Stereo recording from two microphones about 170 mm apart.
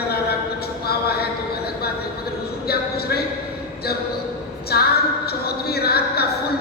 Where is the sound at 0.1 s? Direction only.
70° left (ahead or behind).